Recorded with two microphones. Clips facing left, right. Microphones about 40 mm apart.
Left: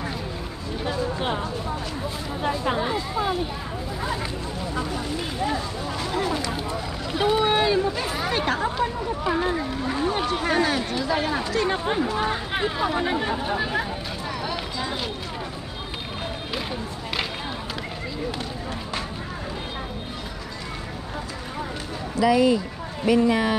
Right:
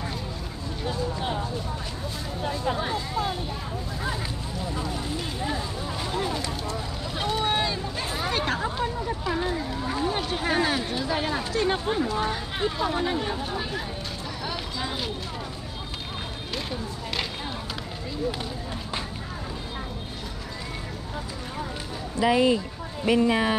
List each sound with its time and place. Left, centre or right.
0.8 s speech: left
7.2 s speech: centre
8.3 s speech: centre
9.2 s speech: left
10.4 s speech: centre
11.8 s speech: left
14.4 s run: centre
22.2 s speech: right